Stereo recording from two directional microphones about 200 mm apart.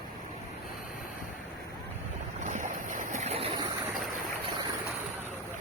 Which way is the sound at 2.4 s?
40° right (ahead or behind).